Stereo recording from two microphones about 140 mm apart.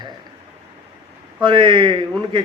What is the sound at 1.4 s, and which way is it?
Speech, 35° right (ahead or behind).